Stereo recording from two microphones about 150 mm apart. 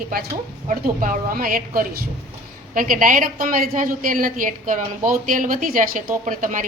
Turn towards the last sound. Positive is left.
turn(degrees=-60)  # may be behind; listen again after turning